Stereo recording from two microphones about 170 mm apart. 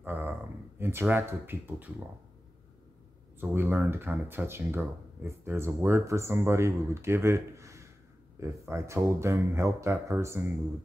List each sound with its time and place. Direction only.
0.0 s speech: 10° right (ahead or behind)
3.3 s speech: 10° right (ahead or behind)